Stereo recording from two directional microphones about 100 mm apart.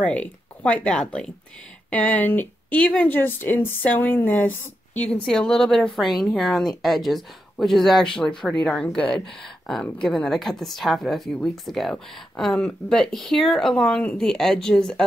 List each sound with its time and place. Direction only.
0.0 s a woman's voice: 15° left (ahead or behind)